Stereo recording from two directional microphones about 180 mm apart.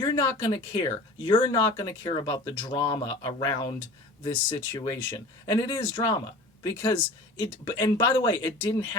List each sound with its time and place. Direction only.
0.0 s speech: 20° left (ahead or behind)